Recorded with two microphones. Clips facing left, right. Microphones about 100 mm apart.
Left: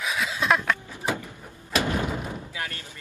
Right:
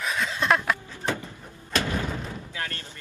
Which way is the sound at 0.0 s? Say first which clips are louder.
Even; 5° left (ahead or behind).